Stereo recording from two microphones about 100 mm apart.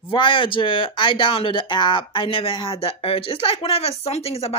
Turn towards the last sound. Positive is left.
turn(degrees=80)